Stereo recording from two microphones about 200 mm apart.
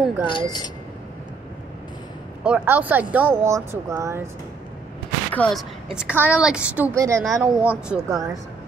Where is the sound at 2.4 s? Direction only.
10° right (ahead or behind).